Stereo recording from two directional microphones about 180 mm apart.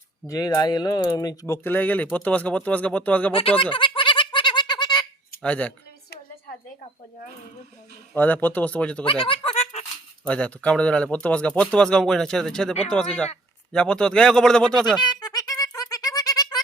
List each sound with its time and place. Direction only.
0.3 s speech: 20° left (ahead or behind)
3.6 s a sound: 30° left (ahead or behind)
5.4 s speech: 5° left (ahead or behind)
8.1 s speech: 10° left (ahead or behind)
9.0 s snicker: 30° left (ahead or behind)
10.2 s speech: 5° left (ahead or behind)
15.0 s music: 20° left (ahead or behind)